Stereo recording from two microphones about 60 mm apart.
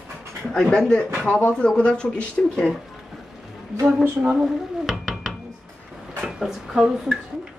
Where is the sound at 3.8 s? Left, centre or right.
Centre.